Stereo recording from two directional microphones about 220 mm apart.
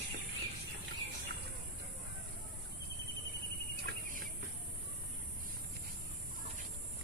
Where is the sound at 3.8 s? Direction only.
40° right (ahead or behind).